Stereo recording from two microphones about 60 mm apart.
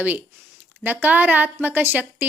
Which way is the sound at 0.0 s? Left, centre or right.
Right.